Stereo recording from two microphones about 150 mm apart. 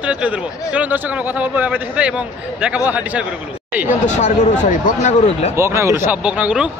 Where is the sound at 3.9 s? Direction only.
50° left (ahead or behind).